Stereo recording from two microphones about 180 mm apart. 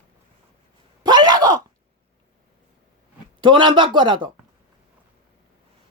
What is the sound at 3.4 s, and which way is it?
Speech, 25° right (ahead or behind).